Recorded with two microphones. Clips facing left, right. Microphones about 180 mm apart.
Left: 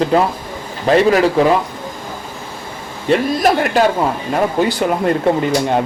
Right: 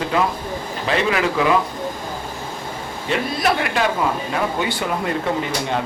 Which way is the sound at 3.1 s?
45° left (ahead or behind).